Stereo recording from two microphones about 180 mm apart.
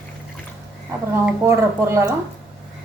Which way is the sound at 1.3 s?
15° right (ahead or behind).